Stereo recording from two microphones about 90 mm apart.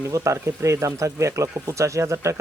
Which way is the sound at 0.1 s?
35° right (ahead or behind).